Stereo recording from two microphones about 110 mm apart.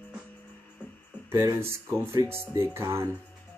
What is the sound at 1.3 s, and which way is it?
Speech, 25° right (ahead or behind).